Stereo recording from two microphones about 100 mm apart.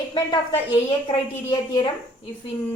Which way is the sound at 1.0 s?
65° left (ahead or behind).